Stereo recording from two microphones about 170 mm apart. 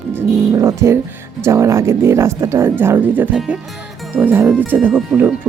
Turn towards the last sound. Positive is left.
turn(degrees=-10)  # may be behind; listen again after turning